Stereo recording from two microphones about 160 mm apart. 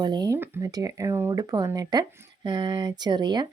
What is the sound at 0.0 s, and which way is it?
Speech, 25° right (ahead or behind).